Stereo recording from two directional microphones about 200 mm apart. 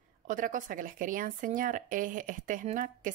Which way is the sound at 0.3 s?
40° right (ahead or behind).